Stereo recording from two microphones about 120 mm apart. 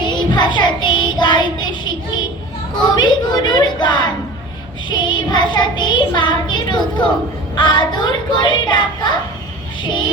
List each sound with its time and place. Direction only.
0.0 s child singing: 40° left (ahead or behind)